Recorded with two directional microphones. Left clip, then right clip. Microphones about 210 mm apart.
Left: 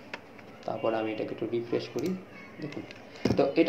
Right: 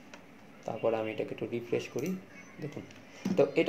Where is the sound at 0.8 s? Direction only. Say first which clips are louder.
Left 1 dB; 50° right (ahead or behind).